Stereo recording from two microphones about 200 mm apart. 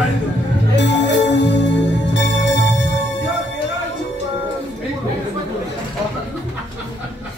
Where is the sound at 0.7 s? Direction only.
60° left (ahead or behind).